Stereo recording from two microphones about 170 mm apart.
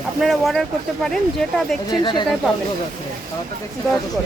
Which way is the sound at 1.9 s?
25° left (ahead or behind).